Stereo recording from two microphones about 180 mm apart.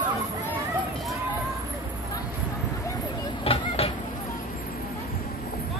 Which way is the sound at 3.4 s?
30° left (ahead or behind).